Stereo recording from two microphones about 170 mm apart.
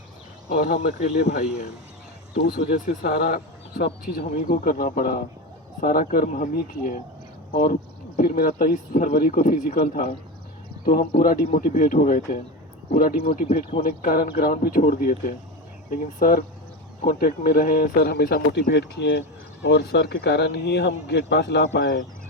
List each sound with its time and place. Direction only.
0.5 s speech: 65° left (ahead or behind)
2.3 s speech: 60° left (ahead or behind)
11.2 s speech: 55° left (ahead or behind); by 22.0 s 80° left